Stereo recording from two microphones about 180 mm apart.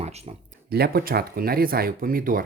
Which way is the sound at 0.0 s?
35° right (ahead or behind).